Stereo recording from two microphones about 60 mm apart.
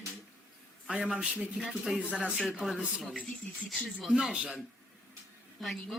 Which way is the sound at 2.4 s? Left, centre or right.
Centre.